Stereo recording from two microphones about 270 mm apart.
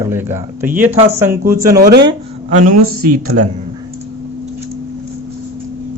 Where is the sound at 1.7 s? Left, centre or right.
Right.